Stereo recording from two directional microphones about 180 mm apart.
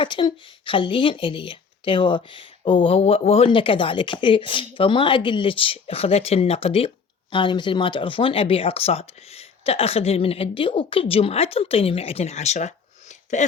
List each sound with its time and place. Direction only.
0.0 s speech: 25° left (ahead or behind); by 13.4 s 40° left (ahead or behind)